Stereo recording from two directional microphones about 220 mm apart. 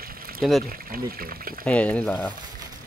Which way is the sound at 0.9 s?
40° right (ahead or behind).